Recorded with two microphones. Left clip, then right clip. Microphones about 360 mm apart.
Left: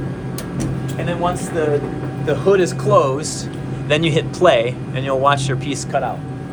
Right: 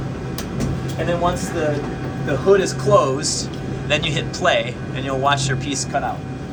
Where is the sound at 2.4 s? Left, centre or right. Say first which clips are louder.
Even; left.